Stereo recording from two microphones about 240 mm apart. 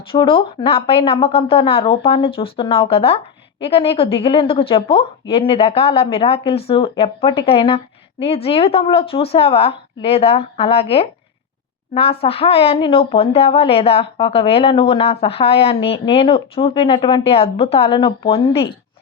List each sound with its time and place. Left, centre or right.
0.1 s a woman's voice: left
12.2 s a woman's voice: left